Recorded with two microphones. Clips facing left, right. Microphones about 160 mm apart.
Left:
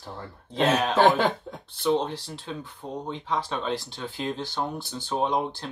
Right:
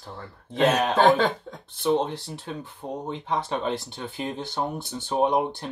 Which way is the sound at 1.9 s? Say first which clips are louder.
Right 1 dB; 20° right (ahead or behind).